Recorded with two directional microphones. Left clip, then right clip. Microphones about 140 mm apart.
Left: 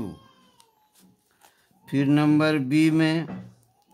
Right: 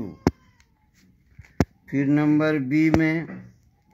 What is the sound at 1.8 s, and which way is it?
Speech, centre (ahead or behind).